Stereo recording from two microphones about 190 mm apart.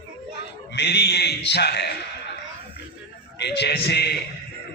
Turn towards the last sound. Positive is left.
turn(degrees=60)  # may be behind; listen again after turning